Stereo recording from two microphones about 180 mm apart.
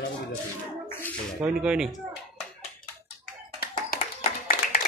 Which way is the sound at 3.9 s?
55° left (ahead or behind).